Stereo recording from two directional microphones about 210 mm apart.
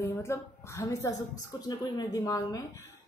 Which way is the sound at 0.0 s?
15° left (ahead or behind).